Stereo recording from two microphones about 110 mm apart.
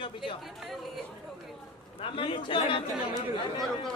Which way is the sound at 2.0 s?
55° left (ahead or behind).